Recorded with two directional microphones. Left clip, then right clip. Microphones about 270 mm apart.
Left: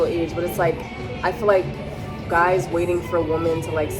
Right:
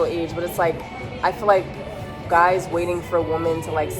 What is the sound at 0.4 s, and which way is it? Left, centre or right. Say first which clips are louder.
A woman's voice: right 2 dB; centre.